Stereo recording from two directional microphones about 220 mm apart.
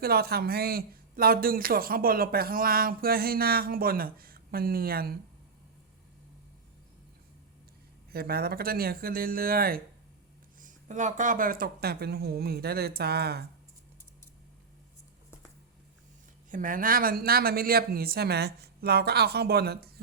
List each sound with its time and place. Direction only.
0.0 s speech: 45° right (ahead or behind)
8.1 s speech: 45° right (ahead or behind)
16.5 s speech: 35° right (ahead or behind)